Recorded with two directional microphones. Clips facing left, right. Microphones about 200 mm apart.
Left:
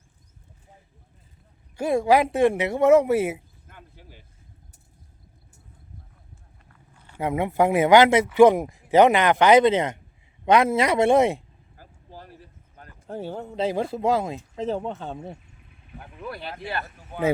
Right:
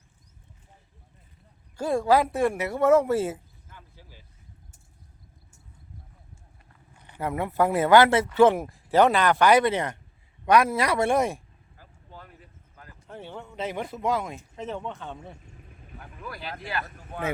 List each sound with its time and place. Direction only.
1.8 s speech: 10° left (ahead or behind)
3.7 s a sound: 60° left (ahead or behind)
7.2 s speech: 20° left (ahead or behind)
11.8 s vehicle: 40° left (ahead or behind)
12.7 s speech: 35° left (ahead or behind)
15.5 s vehicle: 45° right (ahead or behind)
16.2 s speech: 25° left (ahead or behind)
16.8 s speech: 5° left (ahead or behind)